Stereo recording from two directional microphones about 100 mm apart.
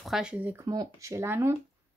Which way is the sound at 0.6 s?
35° right (ahead or behind).